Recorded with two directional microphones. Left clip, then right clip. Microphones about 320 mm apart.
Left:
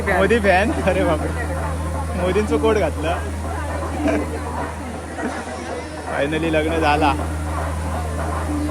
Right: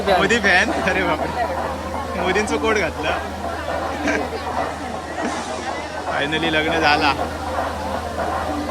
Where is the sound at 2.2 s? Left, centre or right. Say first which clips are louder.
Left 1 dB; centre.